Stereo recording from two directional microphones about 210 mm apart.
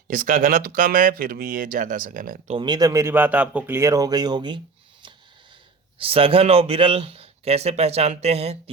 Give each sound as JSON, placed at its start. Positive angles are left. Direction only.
{"t": 0.1, "sound": "speech", "side_deg": -40}
{"t": 2.6, "sound": "speech", "side_deg": -20}
{"t": 6.0, "sound": "speech", "side_deg": -25}